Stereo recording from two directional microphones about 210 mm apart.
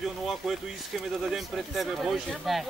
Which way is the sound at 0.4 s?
Centre (ahead or behind).